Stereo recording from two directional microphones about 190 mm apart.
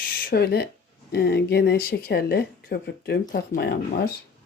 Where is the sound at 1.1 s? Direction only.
55° left (ahead or behind).